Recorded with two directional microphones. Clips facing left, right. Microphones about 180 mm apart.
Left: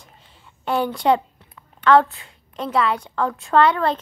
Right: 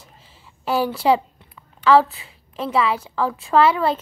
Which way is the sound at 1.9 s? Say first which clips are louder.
Even; 5° right (ahead or behind).